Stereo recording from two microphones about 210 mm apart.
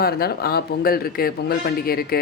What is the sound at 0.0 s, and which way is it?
Speech, 50° left (ahead or behind).